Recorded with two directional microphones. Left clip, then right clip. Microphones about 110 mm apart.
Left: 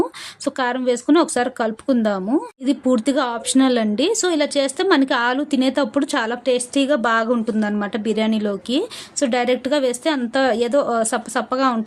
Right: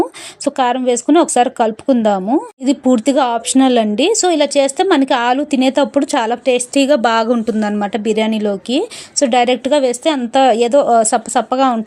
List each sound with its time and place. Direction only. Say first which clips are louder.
0.4 s a woman's voice: right 6 dB; 30° right (ahead or behind)
6.7 s a woman's voice: right 6 dB; 45° right (ahead or behind)
7.3 s speech: right 5 dB; 35° right (ahead or behind)